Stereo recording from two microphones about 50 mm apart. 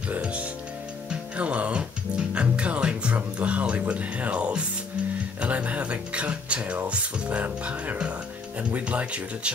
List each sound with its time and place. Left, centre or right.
0.2 s speech: right
1.3 s music: right
3.9 s speech: right